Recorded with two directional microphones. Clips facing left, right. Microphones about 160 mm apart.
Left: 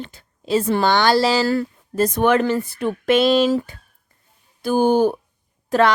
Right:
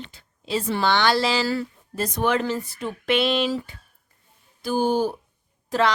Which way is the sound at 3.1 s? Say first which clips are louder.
Left 6 dB; 40° left (ahead or behind).